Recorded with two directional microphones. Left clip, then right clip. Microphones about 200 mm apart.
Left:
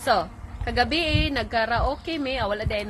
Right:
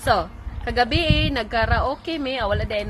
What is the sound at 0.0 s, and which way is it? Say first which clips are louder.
A woman's voice: right 2 dB; 10° right (ahead or behind).